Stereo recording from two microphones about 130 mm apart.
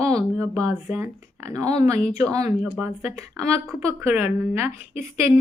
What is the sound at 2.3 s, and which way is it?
Speech, 55° left (ahead or behind).